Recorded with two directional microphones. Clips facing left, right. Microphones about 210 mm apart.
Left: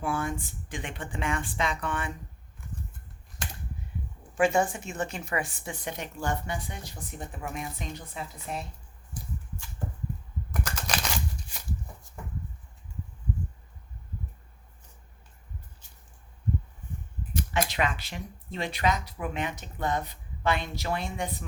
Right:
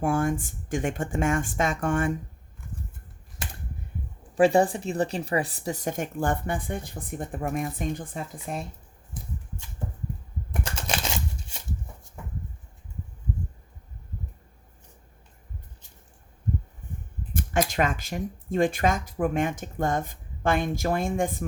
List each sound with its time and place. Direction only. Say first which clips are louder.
0.0 s speech: right 6 dB; 45° right (ahead or behind)
4.4 s speech: right 5 dB; 35° right (ahead or behind)
10.5 s typing: right 2 dB; 25° right (ahead or behind)
17.3 s speech: right 4 dB; 45° right (ahead or behind)